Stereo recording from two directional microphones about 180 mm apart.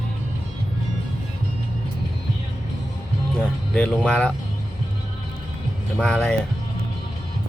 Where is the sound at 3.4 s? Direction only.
5° left (ahead or behind).